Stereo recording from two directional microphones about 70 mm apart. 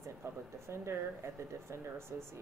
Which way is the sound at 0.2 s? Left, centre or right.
Right.